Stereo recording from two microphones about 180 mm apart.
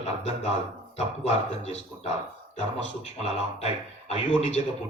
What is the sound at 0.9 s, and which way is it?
Speech, 35° left (ahead or behind).